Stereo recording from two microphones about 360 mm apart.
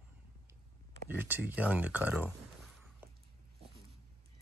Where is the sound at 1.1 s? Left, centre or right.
Centre.